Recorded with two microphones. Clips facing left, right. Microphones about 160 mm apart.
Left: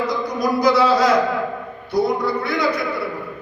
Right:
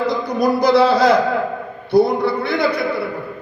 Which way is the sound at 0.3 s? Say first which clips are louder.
Right 3 dB; 65° right (ahead or behind).